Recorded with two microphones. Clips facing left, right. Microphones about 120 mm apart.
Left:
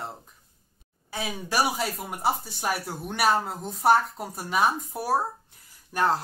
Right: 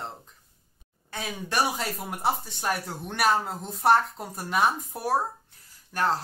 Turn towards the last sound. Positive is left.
turn(degrees=15)  # may be behind; listen again after turning